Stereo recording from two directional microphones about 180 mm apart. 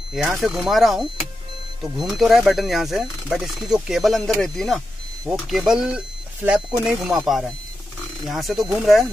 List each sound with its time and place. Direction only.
0.1 s speech: centre (ahead or behind)